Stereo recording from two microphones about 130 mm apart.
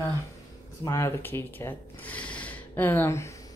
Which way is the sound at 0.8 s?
20° left (ahead or behind).